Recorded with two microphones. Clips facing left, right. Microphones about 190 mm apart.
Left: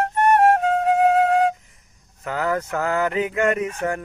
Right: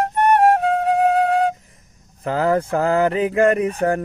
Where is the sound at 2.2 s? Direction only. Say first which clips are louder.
Right 5 dB; 30° right (ahead or behind).